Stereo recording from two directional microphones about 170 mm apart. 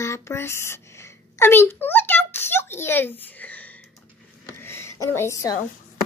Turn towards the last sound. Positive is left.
turn(degrees=15)  # may be behind; listen again after turning